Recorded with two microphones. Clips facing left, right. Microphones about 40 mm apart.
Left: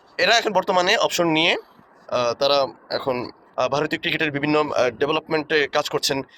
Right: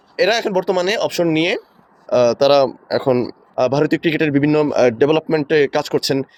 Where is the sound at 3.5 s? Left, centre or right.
Left.